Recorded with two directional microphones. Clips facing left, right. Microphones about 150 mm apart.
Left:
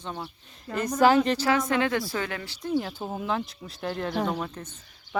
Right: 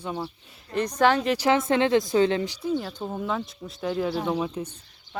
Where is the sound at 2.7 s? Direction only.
5° left (ahead or behind); by 4.8 s 10° right (ahead or behind).